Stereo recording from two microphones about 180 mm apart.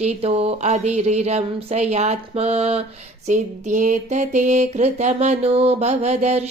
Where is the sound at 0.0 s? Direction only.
35° right (ahead or behind).